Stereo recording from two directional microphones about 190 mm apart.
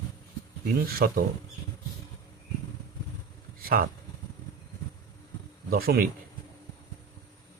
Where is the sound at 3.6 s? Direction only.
50° right (ahead or behind).